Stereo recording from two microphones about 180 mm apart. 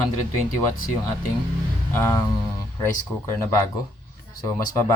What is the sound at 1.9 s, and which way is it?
Speech, 15° left (ahead or behind).